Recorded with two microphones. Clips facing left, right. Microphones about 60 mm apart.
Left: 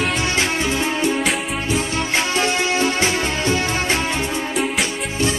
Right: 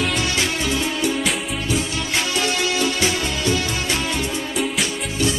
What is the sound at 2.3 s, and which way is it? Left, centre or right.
Music, left.